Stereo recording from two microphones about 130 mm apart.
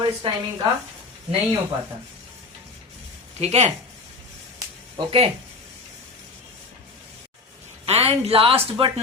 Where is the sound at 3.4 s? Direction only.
60° right (ahead or behind).